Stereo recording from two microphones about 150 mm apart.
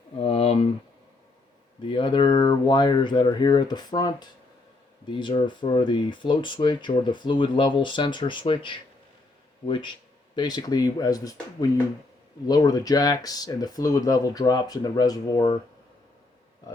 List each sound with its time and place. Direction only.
0.2 s a sound: 40° left (ahead or behind)
1.9 s speech: 35° left (ahead or behind)
12.5 s speech: 25° left (ahead or behind)